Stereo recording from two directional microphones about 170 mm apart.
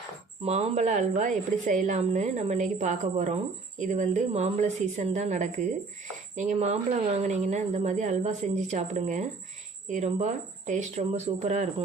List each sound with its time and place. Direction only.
0.4 s a woman's voice: 40° right (ahead or behind)